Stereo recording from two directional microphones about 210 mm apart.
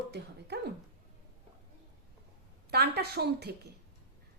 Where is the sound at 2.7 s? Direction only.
50° right (ahead or behind).